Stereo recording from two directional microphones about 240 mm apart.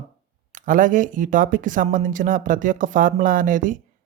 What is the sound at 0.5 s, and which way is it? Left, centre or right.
Speech, right.